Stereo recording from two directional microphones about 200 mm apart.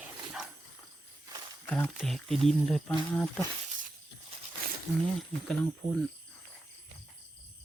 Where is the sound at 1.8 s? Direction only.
Centre (ahead or behind).